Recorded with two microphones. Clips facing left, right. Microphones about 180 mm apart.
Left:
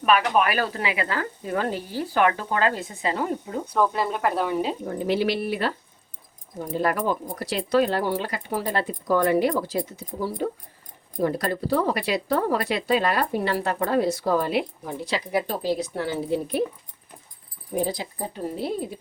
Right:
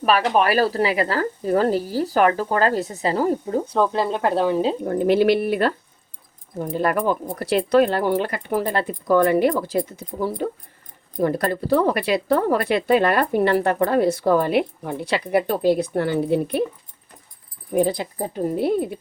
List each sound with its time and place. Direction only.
0.0 s speech: 35° right (ahead or behind)
4.9 s speech: 55° right (ahead or behind)
6.7 s speech: 55° right (ahead or behind)
11.2 s speech: 55° right (ahead or behind)
17.7 s speech: 60° right (ahead or behind)